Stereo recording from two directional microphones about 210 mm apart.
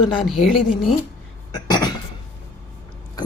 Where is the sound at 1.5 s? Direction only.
20° left (ahead or behind).